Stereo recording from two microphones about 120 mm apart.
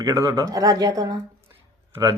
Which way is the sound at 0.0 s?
25° right (ahead or behind).